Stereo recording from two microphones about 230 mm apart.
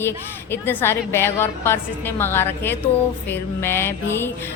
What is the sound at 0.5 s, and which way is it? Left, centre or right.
A woman's voice, centre.